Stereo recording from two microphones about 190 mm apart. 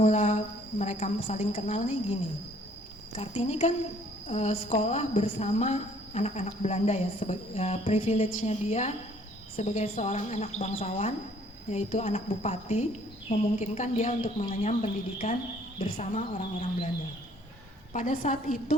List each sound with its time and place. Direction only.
0.0 s cricket: 35° left (ahead or behind)
0.8 s a woman's voice: 35° left (ahead or behind)
3.2 s a woman's voice: 35° left (ahead or behind)
17.9 s a woman's voice: 45° left (ahead or behind)